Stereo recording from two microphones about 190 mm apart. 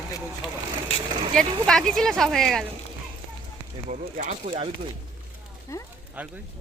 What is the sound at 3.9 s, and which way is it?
Speech, 40° right (ahead or behind).